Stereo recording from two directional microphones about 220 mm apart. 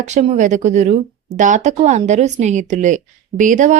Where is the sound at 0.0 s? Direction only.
30° right (ahead or behind).